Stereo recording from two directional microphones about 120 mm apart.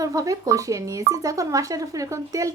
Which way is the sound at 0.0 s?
30° right (ahead or behind).